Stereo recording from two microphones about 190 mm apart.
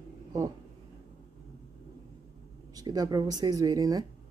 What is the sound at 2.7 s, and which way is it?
Speech, 20° right (ahead or behind).